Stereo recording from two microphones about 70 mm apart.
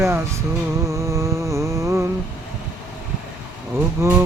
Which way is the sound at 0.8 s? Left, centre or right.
Right.